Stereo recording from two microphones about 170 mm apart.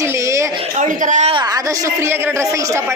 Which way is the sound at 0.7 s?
45° right (ahead or behind).